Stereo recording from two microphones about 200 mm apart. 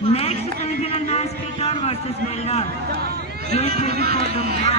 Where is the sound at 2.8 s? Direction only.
50° right (ahead or behind).